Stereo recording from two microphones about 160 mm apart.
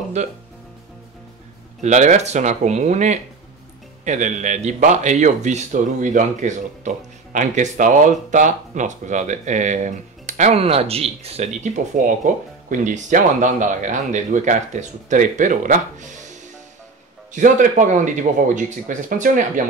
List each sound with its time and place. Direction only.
1.8 s speech: 50° right (ahead or behind)
17.3 s speech: 50° right (ahead or behind)